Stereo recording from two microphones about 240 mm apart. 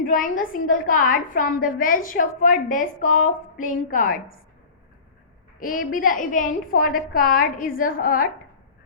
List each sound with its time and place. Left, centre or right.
0.0 s a woman's voice: left
5.5 s a woman's voice: left